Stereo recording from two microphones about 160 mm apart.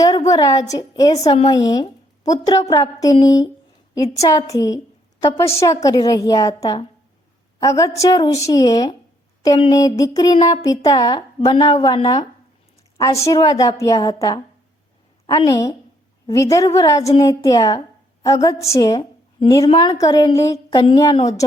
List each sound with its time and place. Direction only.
0.3 s a woman's voice: 20° left (ahead or behind)